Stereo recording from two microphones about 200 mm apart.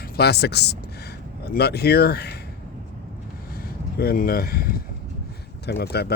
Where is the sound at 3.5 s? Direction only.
50° left (ahead or behind).